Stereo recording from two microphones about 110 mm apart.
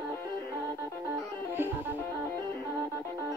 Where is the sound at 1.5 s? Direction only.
20° right (ahead or behind).